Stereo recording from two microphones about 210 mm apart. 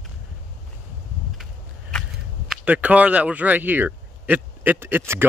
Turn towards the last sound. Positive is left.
turn(degrees=-10)  # may be behind; listen again after turning